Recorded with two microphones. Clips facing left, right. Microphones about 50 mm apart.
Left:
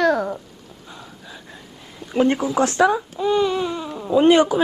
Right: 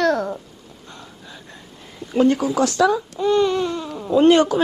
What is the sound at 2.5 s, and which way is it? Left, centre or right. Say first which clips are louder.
Speech: even; left.